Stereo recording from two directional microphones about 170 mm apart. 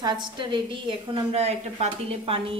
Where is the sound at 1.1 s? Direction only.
40° right (ahead or behind).